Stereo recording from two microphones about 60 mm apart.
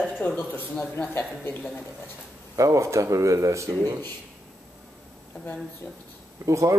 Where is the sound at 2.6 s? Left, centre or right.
Right.